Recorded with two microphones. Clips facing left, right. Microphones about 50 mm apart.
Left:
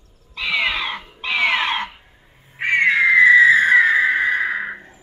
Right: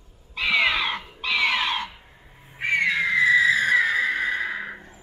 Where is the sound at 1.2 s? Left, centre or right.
Left.